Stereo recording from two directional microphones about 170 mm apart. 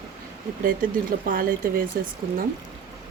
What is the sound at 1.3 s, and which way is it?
Speech, 55° right (ahead or behind).